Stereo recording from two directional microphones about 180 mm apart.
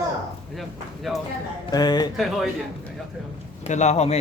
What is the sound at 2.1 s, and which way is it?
Speech, centre (ahead or behind).